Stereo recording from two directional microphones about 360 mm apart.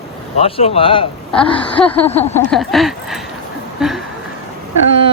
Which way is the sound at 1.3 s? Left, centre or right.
Centre.